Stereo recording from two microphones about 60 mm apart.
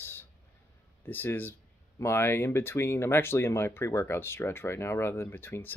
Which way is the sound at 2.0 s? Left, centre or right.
Left.